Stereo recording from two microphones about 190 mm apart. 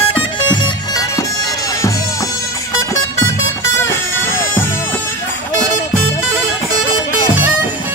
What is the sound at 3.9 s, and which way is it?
Music, 10° left (ahead or behind).